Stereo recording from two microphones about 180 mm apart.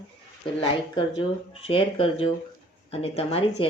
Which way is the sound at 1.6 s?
30° left (ahead or behind).